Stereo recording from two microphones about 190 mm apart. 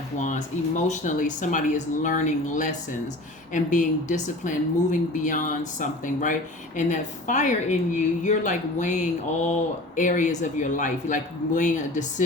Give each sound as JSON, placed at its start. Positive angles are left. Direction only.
{"t": 0.2, "sound": "speech", "side_deg": 40}